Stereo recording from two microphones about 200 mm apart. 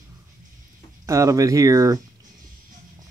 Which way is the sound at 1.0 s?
15° right (ahead or behind).